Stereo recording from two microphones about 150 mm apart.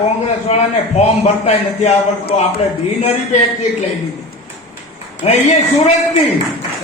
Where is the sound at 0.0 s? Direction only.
45° left (ahead or behind).